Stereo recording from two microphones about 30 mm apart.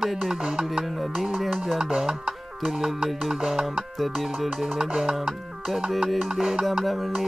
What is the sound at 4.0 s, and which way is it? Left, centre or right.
Music, centre.